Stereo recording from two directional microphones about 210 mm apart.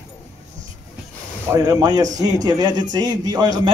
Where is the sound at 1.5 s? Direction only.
15° right (ahead or behind).